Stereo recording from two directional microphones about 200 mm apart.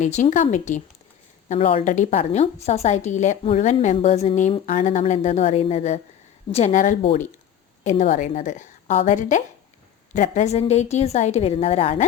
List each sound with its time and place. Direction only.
0.0 s a woman's voice: 35° left (ahead or behind)